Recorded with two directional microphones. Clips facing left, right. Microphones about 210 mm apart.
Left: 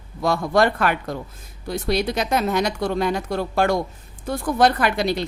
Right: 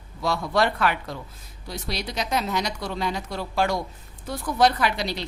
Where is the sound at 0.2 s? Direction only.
50° left (ahead or behind).